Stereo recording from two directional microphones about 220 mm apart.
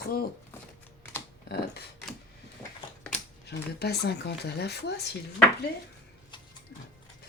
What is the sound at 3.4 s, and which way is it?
Speech, 50° left (ahead or behind).